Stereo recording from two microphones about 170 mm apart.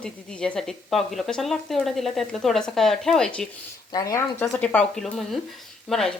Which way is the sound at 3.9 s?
20° left (ahead or behind).